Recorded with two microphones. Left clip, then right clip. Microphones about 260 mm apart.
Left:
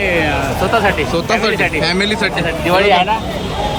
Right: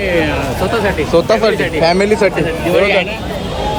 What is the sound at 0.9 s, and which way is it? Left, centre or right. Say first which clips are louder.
A man's voice: right 3 dB; centre.